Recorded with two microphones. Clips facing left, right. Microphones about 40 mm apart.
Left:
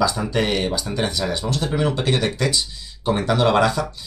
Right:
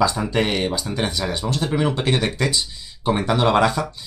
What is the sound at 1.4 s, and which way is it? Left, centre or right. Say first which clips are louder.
Speech: right 2 dB; right.